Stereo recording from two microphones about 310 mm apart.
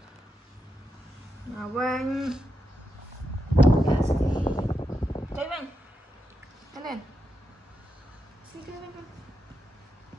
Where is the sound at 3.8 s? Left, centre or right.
Centre.